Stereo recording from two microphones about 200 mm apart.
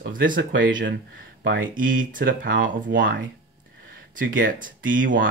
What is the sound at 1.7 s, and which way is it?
Speech, 45° right (ahead or behind).